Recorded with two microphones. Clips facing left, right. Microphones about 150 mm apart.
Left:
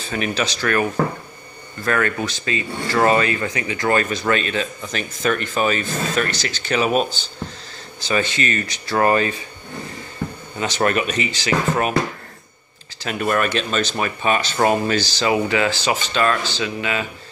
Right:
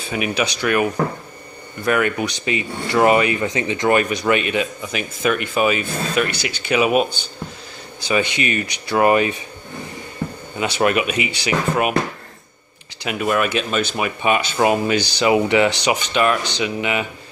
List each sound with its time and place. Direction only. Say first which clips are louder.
0.1 s speech: right 1 dB; 10° right (ahead or behind)
10.6 s speech: right 2 dB; 10° right (ahead or behind)
13.0 s speech: right 1 dB; 5° right (ahead or behind)